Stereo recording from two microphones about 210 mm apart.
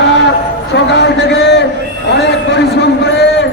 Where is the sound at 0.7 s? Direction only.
55° left (ahead or behind).